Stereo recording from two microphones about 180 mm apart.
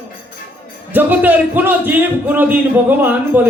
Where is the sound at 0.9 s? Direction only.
10° right (ahead or behind).